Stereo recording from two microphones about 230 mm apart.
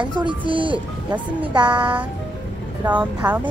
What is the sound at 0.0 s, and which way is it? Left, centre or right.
Speech, centre.